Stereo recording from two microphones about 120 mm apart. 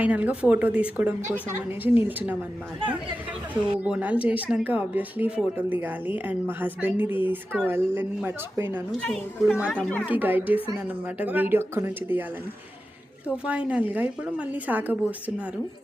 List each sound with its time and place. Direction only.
0.0 s speech: 10° right (ahead or behind)
3.5 s speech: 10° right (ahead or behind)
9.0 s a woman's voice: 10° left (ahead or behind)
10.1 s speech: 15° right (ahead or behind)
13.3 s speech: 10° right (ahead or behind)